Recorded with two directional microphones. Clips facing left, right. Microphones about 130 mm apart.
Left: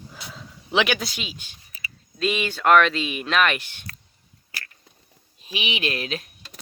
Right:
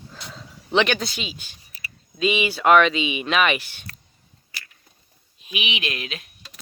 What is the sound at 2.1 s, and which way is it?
Speech, 5° right (ahead or behind).